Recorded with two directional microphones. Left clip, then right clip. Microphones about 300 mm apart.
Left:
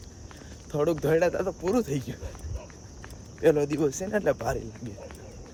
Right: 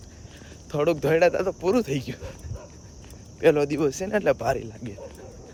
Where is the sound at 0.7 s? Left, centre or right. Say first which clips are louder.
Right 3 dB; right.